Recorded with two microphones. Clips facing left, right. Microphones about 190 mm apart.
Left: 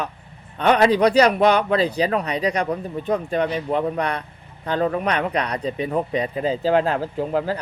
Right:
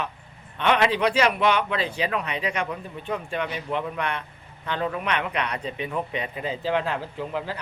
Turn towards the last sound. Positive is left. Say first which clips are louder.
# left 8 dB
turn(degrees=40)  # may be behind; listen again after turning